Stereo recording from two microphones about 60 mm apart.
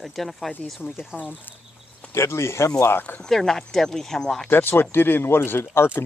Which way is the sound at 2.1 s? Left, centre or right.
Left.